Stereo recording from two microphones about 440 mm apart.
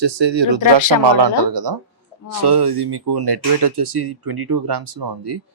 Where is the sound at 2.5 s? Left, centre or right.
Right.